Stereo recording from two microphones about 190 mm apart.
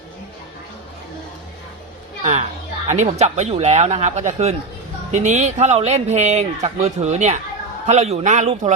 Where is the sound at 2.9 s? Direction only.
40° right (ahead or behind).